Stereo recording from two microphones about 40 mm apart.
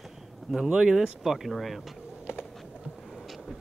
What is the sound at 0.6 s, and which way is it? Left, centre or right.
Speech, centre.